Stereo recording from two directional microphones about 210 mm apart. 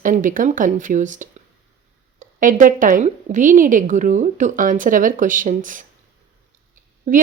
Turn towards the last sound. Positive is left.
turn(degrees=-35)  # may be behind; listen again after turning